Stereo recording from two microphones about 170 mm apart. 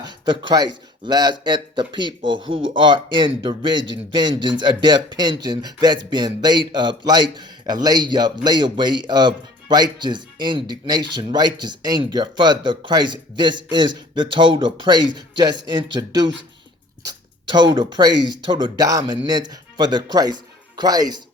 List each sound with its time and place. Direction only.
0.0 s speech: 25° right (ahead or behind)
17.1 s a sound: 25° right (ahead or behind)
17.7 s speech: 25° right (ahead or behind)